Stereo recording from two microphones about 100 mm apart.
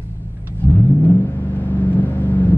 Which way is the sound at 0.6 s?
20° left (ahead or behind).